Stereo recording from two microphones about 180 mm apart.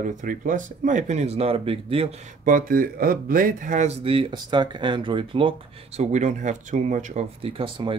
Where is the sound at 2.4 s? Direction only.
50° right (ahead or behind); by 8.0 s 30° right (ahead or behind).